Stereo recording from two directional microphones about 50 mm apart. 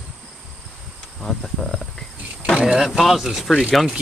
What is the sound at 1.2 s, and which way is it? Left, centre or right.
Cricket, centre.